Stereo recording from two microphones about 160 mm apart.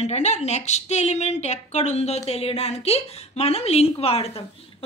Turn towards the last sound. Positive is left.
turn(degrees=40)  # may be behind; listen again after turning